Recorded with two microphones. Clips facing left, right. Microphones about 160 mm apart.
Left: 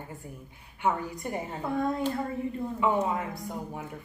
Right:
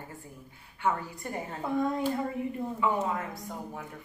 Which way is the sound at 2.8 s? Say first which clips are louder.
Left 3 dB; 15° left (ahead or behind).